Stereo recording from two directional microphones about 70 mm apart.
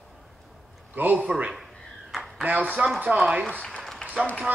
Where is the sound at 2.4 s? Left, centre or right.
Right.